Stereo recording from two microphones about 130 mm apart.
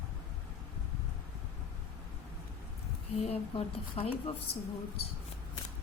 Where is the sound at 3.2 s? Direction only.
50° left (ahead or behind).